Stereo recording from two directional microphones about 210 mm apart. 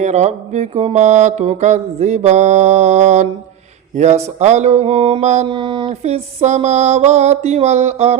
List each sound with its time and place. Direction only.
0.0 s mantra: 35° right (ahead or behind)